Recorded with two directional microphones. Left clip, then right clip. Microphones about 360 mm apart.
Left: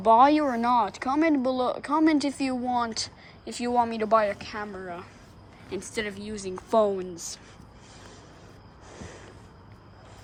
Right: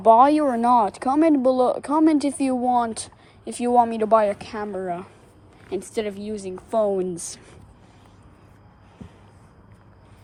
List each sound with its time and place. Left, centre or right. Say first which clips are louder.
0.0 s speech: right 4 dB; centre
7.1 s speech: right 6 dB; right